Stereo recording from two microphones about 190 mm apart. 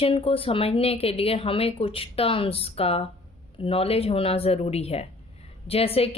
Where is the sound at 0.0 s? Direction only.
30° left (ahead or behind).